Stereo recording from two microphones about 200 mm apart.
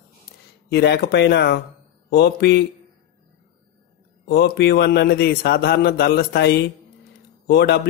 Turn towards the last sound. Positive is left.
turn(degrees=55)  # may be behind; listen again after turning